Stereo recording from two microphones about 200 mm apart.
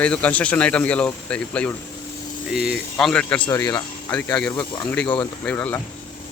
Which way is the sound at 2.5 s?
5° right (ahead or behind).